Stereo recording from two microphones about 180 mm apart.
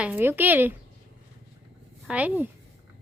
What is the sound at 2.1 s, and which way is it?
Speech, 10° right (ahead or behind).